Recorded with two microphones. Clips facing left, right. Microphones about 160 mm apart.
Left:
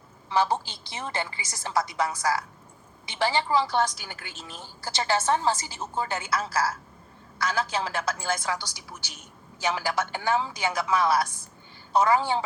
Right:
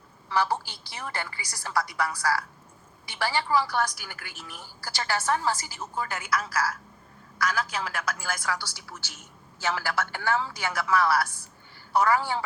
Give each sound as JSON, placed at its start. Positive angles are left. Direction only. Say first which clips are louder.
{"t": 0.3, "sound": "a woman's voice", "louder": "left 2 dB", "side_deg": 20}